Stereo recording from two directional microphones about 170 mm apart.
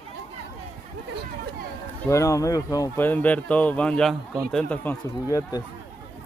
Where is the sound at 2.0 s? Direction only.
20° left (ahead or behind).